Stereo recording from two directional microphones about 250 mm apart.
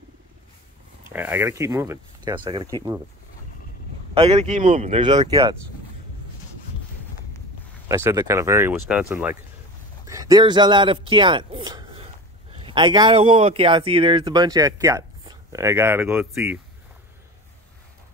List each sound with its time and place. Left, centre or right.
1.0 s speech: centre
4.1 s speech: right
7.9 s a man's voice: centre